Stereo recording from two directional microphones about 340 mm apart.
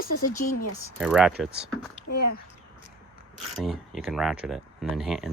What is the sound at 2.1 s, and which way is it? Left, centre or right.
Speech, left.